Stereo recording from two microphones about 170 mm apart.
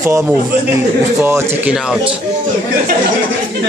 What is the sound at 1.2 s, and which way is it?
Speech, 10° right (ahead or behind).